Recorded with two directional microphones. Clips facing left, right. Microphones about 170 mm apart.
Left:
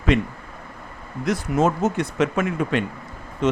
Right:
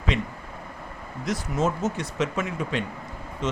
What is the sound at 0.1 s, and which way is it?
Speech, 55° left (ahead or behind).